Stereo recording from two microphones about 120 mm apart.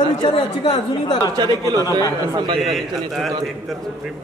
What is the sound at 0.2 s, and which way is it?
A woman's voice, 50° left (ahead or behind).